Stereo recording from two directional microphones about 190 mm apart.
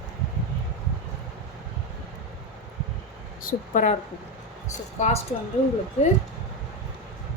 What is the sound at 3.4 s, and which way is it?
Speech, 45° left (ahead or behind).